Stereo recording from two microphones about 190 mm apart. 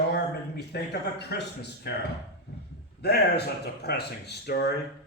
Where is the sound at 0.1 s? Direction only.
55° left (ahead or behind).